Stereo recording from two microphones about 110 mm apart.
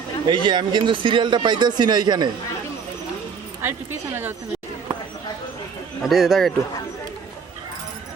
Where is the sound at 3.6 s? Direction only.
20° right (ahead or behind).